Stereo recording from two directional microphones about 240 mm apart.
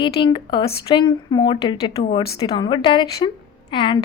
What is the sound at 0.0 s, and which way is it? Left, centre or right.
Speech, centre.